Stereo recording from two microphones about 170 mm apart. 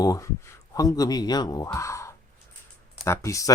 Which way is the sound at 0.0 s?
20° left (ahead or behind).